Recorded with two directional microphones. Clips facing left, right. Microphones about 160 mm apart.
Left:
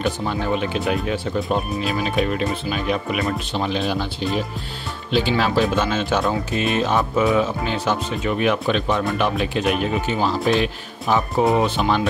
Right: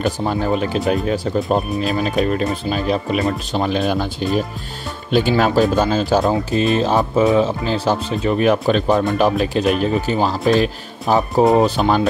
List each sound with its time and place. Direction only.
0.0 s speech: 40° right (ahead or behind)
5.4 s speech: 40° right (ahead or behind)